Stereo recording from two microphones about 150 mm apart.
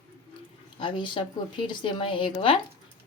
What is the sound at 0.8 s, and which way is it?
Speech, 35° left (ahead or behind).